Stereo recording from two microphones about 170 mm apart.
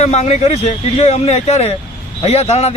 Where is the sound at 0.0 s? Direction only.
40° left (ahead or behind).